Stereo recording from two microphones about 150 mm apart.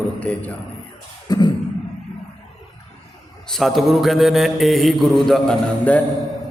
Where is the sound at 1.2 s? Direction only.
25° left (ahead or behind).